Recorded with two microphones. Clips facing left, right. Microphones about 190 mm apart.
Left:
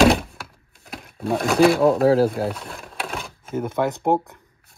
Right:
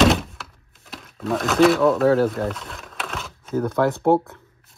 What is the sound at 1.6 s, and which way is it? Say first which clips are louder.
Speech: even; 30° left (ahead or behind).